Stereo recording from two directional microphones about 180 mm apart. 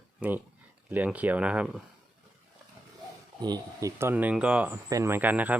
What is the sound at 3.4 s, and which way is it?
Speech, 20° right (ahead or behind).